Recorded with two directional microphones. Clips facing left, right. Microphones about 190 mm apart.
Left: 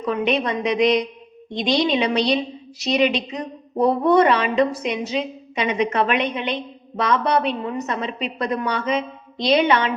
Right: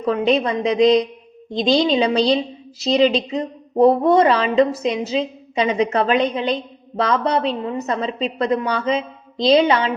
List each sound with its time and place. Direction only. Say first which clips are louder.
0.0 s a woman's voice: right 3 dB; 30° right (ahead or behind)